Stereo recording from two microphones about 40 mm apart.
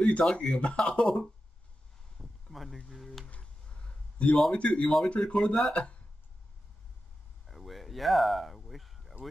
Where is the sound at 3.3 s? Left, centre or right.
Left.